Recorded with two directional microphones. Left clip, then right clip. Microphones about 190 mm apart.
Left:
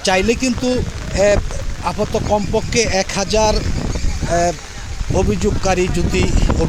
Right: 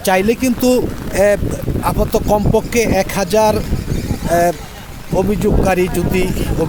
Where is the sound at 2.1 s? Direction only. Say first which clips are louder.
Right 4 dB; 30° right (ahead or behind).